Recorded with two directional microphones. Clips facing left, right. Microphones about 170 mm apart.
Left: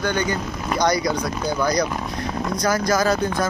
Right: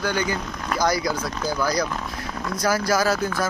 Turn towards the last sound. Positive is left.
turn(degrees=-5)  # may be behind; listen again after turning